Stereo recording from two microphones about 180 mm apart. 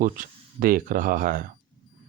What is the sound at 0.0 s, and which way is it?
Speech, 50° right (ahead or behind).